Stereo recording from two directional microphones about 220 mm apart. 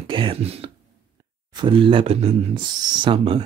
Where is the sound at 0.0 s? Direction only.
25° right (ahead or behind).